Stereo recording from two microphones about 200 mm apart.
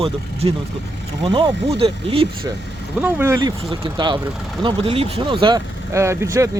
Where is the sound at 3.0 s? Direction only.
15° right (ahead or behind).